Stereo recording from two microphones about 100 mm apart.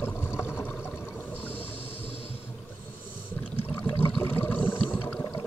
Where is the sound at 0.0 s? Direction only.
25° left (ahead or behind).